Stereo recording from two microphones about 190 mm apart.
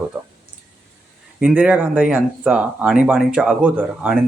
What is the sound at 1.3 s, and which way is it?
Speech, 5° right (ahead or behind).